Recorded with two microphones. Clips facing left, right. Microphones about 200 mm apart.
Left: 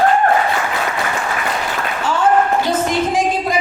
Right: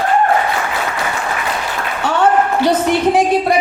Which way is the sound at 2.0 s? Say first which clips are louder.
Right 4 dB; 65° right (ahead or behind).